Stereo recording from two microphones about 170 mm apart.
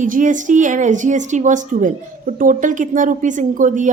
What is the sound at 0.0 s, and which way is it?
A woman's voice, 50° right (ahead or behind).